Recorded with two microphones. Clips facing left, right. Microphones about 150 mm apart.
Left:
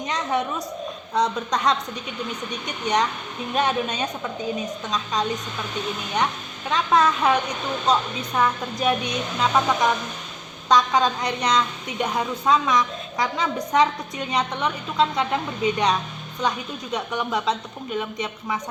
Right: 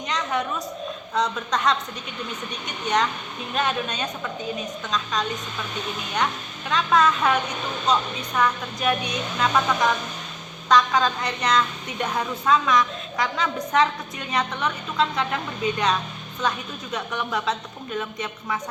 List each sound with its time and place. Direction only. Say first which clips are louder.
0.1 s a sound: left 1 dB; 25° left (ahead or behind)
1.1 s a woman's voice: left 2 dB; 15° left (ahead or behind)
2.8 s a woman's voice: even; 15° left (ahead or behind)
6.7 s speech: left 1 dB; 20° left (ahead or behind)
8.4 s a woman's voice: left 1 dB; 20° left (ahead or behind)